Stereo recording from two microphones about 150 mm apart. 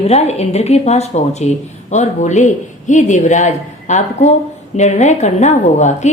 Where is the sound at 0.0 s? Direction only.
45° left (ahead or behind).